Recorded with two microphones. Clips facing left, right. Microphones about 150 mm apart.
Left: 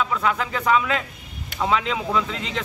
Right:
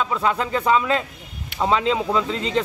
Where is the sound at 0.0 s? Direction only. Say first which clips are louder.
Right 1 dB; 30° right (ahead or behind).